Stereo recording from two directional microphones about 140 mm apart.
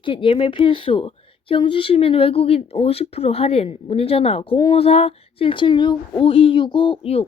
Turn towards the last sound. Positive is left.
turn(degrees=45)  # may be behind; listen again after turning